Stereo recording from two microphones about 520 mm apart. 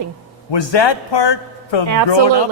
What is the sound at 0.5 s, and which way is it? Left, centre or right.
A man's voice, left.